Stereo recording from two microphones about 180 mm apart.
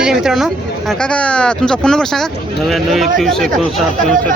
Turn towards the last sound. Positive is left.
turn(degrees=0)  # may be behind; listen again after turning